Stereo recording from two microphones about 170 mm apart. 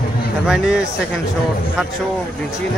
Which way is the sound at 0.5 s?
5° right (ahead or behind).